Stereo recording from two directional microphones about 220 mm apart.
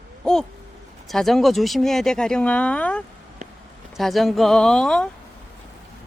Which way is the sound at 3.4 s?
35° right (ahead or behind).